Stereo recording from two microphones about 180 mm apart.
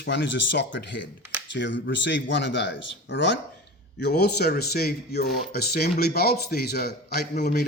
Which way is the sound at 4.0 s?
65° left (ahead or behind).